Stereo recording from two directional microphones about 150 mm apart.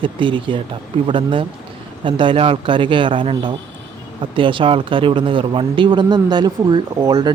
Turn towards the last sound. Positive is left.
turn(degrees=-30)  # may be behind; listen again after turning